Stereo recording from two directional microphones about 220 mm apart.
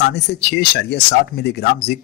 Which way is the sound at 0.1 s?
50° left (ahead or behind).